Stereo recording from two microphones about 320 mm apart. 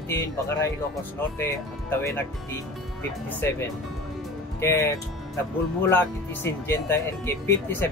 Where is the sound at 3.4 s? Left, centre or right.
Centre.